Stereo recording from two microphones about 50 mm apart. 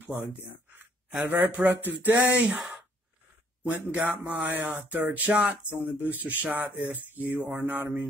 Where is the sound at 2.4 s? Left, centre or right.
Centre.